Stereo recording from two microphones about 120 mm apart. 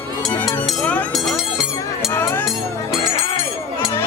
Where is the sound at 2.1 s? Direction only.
20° left (ahead or behind).